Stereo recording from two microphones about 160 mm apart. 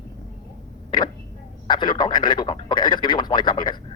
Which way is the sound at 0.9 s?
30° left (ahead or behind).